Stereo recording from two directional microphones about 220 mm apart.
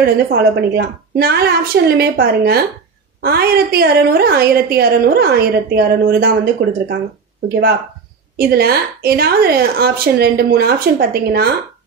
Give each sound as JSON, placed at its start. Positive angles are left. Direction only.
{"t": 0.0, "sound": "a woman's voice", "side_deg": -45}
{"t": 8.4, "sound": "a woman's voice", "side_deg": -45}